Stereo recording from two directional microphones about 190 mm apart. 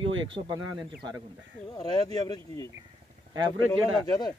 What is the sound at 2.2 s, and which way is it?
Speech, 20° left (ahead or behind).